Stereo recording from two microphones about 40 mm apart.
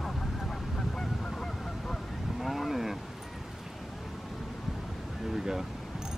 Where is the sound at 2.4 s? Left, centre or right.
Centre.